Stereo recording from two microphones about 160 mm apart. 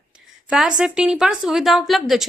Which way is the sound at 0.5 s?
5° right (ahead or behind).